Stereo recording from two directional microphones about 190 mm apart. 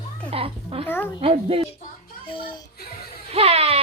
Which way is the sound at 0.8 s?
10° left (ahead or behind).